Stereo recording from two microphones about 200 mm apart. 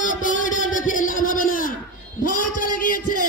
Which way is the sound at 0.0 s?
40° left (ahead or behind).